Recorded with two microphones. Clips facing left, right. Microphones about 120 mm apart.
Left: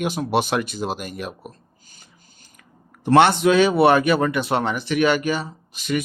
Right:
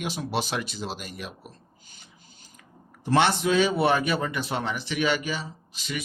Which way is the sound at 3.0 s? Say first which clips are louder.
Left 7 dB; 60° left (ahead or behind).